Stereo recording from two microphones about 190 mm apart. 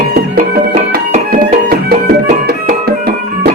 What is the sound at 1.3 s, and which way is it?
Music, 50° right (ahead or behind).